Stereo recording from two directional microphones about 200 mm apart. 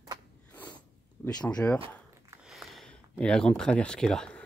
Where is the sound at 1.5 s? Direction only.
5° left (ahead or behind).